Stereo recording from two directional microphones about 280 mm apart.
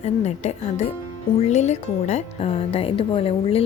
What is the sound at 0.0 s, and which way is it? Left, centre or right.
Speech, left.